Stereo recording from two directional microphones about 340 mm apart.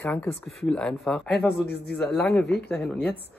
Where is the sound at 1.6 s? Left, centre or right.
Left.